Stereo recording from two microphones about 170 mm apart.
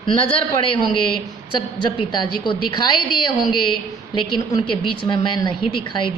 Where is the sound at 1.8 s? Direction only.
30° left (ahead or behind).